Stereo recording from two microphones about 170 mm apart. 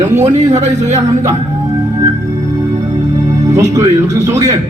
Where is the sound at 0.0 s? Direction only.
40° right (ahead or behind).